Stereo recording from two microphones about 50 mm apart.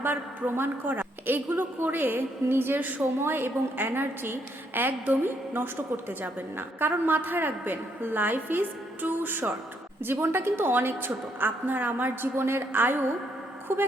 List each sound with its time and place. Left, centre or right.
0.0 s a woman's voice: right